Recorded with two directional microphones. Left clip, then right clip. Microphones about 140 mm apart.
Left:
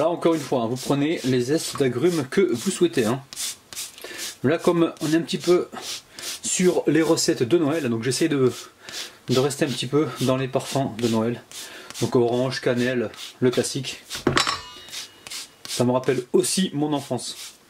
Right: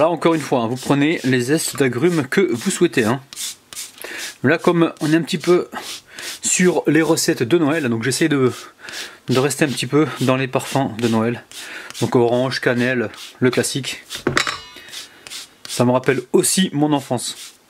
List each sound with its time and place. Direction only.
0.0 s speech: 30° right (ahead or behind)
4.4 s speech: 35° right (ahead or behind)
6.4 s speech: 35° right (ahead or behind)
14.1 s music: 5° right (ahead or behind)
15.8 s speech: 35° right (ahead or behind)